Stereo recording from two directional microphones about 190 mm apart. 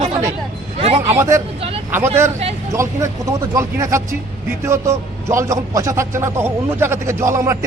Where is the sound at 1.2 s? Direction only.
15° right (ahead or behind).